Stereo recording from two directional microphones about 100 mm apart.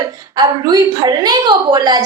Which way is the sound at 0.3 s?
45° right (ahead or behind).